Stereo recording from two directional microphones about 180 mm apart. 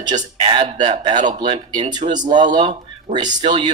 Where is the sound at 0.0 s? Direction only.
25° right (ahead or behind).